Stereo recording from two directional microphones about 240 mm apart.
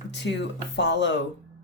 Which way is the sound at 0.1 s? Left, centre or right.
Left.